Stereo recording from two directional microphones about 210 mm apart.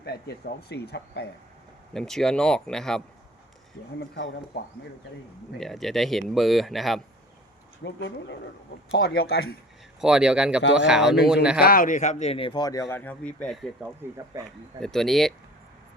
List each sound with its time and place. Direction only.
0.0 s speech: 50° left (ahead or behind)
1.9 s speech: centre (ahead or behind)
4.1 s speech: 50° left (ahead or behind)
5.5 s speech: centre (ahead or behind)
7.9 s speech: 60° left (ahead or behind)
8.9 s speech: 50° left (ahead or behind)
10.0 s speech: 5° right (ahead or behind)
11.6 s speech: 40° left (ahead or behind); by 12.8 s 20° left (ahead or behind)
12.9 s speech: 10° left (ahead or behind)
13.8 s speech: 15° right (ahead or behind)
14.8 s speech: centre (ahead or behind)